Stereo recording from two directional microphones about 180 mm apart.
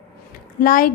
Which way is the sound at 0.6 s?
50° left (ahead or behind).